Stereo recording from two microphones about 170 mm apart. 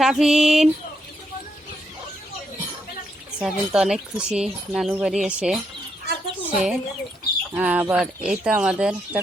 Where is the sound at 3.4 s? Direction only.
5° right (ahead or behind).